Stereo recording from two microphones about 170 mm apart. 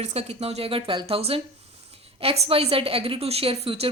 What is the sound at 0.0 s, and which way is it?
A woman's voice, 40° right (ahead or behind).